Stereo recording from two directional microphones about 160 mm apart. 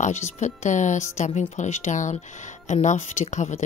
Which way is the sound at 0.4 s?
50° left (ahead or behind).